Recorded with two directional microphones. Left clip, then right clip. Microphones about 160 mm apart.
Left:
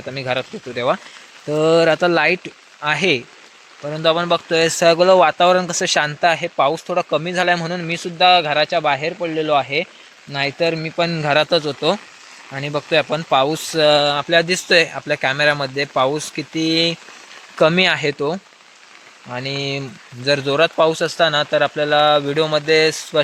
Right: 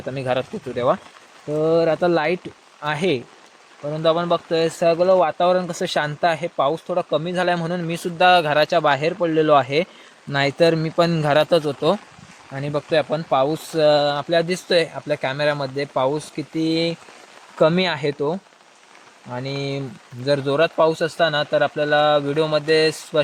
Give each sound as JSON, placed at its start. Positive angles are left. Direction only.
{"t": 0.0, "sound": "speech", "side_deg": -20}
{"t": 1.5, "sound": "speech", "side_deg": 0}
{"t": 11.3, "sound": "speech", "side_deg": -15}